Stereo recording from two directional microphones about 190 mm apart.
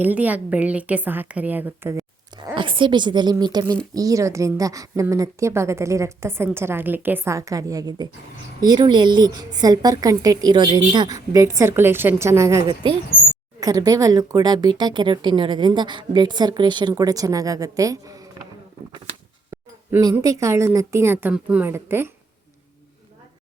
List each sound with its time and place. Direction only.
0.0 s a woman's voice: 10° right (ahead or behind)
18.9 s a sound: 25° right (ahead or behind)
19.9 s a woman's voice: 15° right (ahead or behind)